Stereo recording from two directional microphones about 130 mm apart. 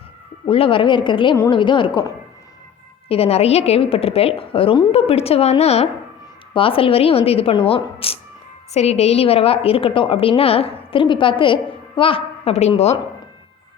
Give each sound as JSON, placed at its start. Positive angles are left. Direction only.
{"t": 0.4, "sound": "a woman's voice", "side_deg": 45}
{"t": 3.1, "sound": "a woman's voice", "side_deg": 50}